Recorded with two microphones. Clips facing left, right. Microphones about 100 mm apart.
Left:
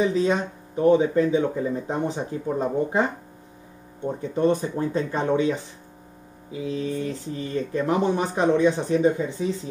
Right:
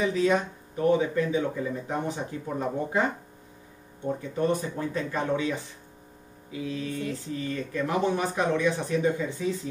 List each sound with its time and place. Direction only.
0.0 s speech: 25° left (ahead or behind)
4.2 s speech: 25° left (ahead or behind)
6.6 s speech: 25° left (ahead or behind)